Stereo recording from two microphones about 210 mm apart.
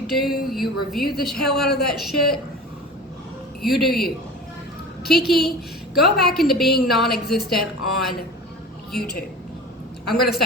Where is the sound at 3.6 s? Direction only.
Centre (ahead or behind).